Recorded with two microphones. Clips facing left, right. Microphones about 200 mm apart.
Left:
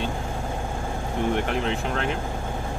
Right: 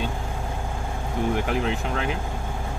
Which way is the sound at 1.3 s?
5° right (ahead or behind).